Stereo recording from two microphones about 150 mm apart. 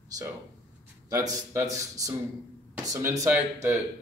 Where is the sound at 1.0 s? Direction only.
20° right (ahead or behind).